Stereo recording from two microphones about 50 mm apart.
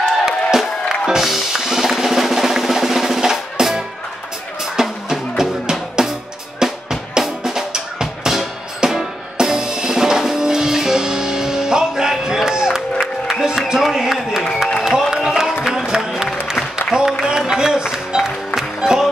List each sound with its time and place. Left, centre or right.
0.2 s music: centre
6.6 s drum: centre
13.0 s music: centre